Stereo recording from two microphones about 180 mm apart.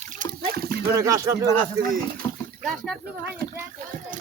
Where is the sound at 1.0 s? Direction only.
15° right (ahead or behind).